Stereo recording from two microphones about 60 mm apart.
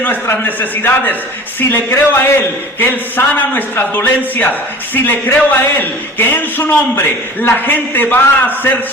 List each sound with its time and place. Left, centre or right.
0.4 s a man's voice: left